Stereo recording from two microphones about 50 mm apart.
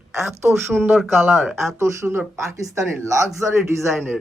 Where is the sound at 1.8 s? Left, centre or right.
Right.